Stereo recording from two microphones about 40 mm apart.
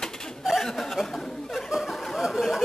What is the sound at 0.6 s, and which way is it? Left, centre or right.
Chuckle, centre.